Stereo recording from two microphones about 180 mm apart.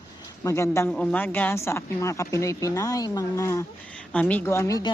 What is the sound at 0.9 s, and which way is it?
Speech, 5° left (ahead or behind).